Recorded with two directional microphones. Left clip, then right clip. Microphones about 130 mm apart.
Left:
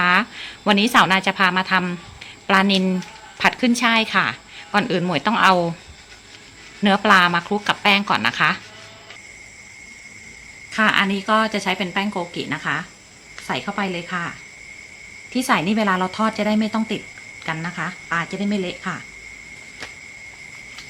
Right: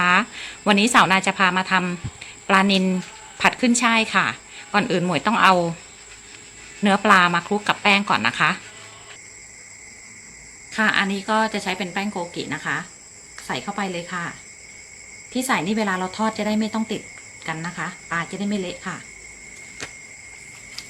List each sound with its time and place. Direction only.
0.0 s a woman's voice: centre (ahead or behind)
6.8 s a woman's voice: centre (ahead or behind)
10.7 s a woman's voice: 30° left (ahead or behind)
15.3 s a woman's voice: 40° left (ahead or behind)